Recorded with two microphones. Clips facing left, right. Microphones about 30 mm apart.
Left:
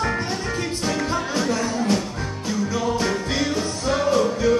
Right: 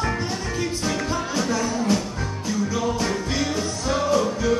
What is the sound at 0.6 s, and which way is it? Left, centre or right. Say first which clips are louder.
Music: right 1 dB; centre.